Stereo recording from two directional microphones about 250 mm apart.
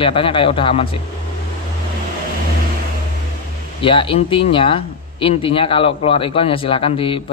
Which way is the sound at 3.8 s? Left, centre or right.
Left.